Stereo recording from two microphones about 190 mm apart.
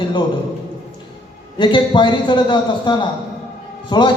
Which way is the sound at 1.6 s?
25° left (ahead or behind).